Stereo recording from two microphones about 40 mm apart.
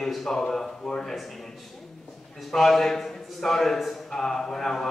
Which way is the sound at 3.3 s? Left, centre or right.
Centre.